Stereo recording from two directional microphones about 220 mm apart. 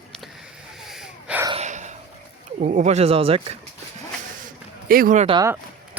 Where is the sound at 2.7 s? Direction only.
30° right (ahead or behind).